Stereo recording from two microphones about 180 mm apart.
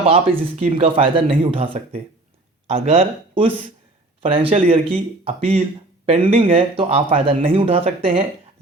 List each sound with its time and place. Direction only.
0.0 s speech: 30° right (ahead or behind)